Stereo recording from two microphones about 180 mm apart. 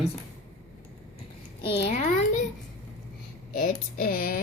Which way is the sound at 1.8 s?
40° left (ahead or behind).